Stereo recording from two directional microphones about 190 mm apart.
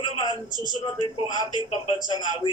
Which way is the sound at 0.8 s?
25° left (ahead or behind).